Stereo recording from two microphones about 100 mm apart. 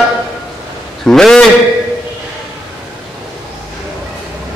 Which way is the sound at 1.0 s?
5° left (ahead or behind).